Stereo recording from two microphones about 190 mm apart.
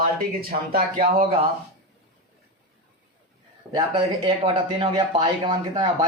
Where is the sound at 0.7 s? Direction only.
50° right (ahead or behind).